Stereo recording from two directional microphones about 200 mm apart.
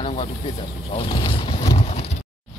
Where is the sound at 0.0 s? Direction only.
30° left (ahead or behind).